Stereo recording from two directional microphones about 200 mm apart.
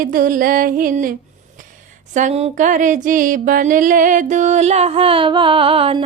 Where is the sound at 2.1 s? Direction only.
40° right (ahead or behind).